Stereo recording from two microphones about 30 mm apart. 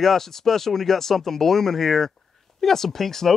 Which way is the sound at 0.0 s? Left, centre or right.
Centre.